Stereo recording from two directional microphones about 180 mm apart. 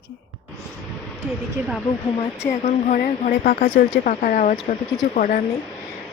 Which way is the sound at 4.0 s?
50° left (ahead or behind).